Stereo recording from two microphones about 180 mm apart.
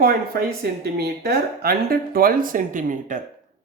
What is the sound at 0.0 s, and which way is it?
Speech, 55° right (ahead or behind).